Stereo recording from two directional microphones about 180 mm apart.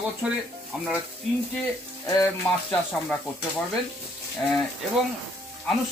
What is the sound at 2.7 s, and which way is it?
Speech, 10° left (ahead or behind).